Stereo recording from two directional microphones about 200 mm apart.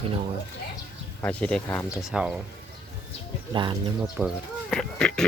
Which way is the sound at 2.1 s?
5° right (ahead or behind).